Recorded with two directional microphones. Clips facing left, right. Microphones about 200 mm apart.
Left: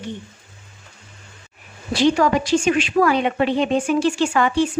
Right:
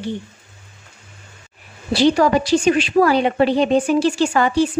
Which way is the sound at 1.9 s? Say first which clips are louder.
Right 2 dB; 35° right (ahead or behind).